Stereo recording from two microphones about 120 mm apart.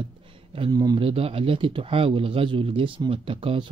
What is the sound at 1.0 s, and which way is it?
Speech, 55° right (ahead or behind).